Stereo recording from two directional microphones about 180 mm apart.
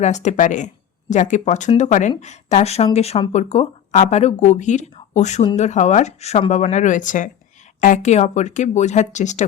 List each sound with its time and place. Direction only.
0.0 s speech: 40° left (ahead or behind)